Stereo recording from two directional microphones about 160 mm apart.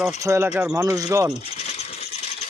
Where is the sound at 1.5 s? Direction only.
40° left (ahead or behind).